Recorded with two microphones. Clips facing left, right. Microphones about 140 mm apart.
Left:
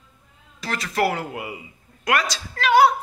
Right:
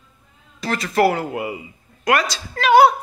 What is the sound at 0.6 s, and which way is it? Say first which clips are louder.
Speech: right 5 dB; 5° right (ahead or behind).